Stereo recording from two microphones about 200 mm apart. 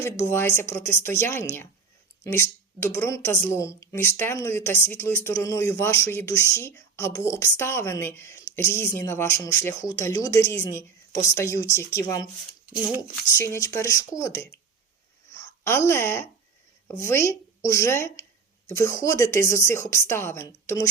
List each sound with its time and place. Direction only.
0.0 s speech: 10° left (ahead or behind)